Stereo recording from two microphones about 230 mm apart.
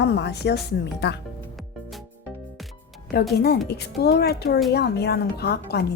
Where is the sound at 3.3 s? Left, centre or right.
Left.